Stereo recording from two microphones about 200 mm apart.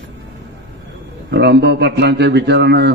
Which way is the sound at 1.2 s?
60° right (ahead or behind).